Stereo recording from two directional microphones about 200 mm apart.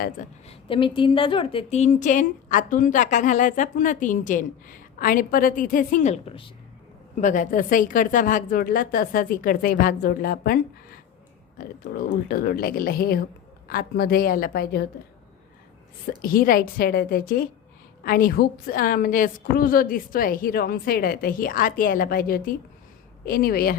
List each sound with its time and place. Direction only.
0.0 s a woman's voice: 40° left (ahead or behind)
0.7 s a woman's voice: 25° left (ahead or behind)
7.2 s a woman's voice: 40° left (ahead or behind)
11.6 s a woman's voice: 45° left (ahead or behind)
16.0 s a woman's voice: 45° left (ahead or behind)